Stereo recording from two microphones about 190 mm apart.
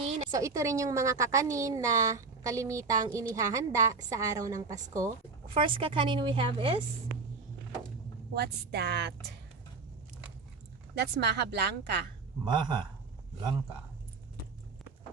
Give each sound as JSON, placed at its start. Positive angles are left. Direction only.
{"t": 0.3, "sound": "a woman's voice", "side_deg": -15}
{"t": 5.5, "sound": "a woman's voice", "side_deg": -25}
{"t": 8.3, "sound": "speech", "side_deg": -60}
{"t": 10.9, "sound": "speech", "side_deg": -60}
{"t": 12.5, "sound": "a woman's voice", "side_deg": -25}